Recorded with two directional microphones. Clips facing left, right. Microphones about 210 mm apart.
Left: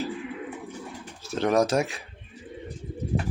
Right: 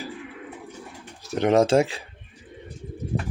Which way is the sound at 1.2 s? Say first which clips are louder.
Right 3 dB; 15° right (ahead or behind).